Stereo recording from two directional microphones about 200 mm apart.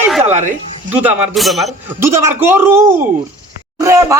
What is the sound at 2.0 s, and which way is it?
Speech, 15° right (ahead or behind).